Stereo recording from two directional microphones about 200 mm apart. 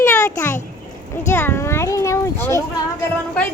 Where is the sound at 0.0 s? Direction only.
15° left (ahead or behind).